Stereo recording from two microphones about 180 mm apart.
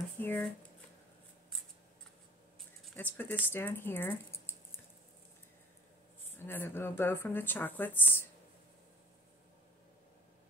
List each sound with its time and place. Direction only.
0.2 s speech: 10° left (ahead or behind)
2.8 s speech: 10° left (ahead or behind)
6.3 s speech: 10° left (ahead or behind)